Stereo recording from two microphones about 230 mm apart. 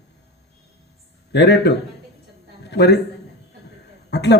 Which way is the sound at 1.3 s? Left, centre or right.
Left.